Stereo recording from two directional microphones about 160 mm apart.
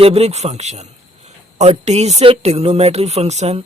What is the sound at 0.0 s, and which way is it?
A man's voice, 40° right (ahead or behind).